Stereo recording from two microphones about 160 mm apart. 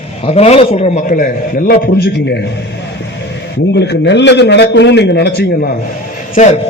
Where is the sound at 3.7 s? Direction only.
90° left.